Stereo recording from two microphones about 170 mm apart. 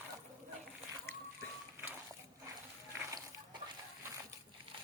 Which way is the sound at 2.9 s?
15° right (ahead or behind).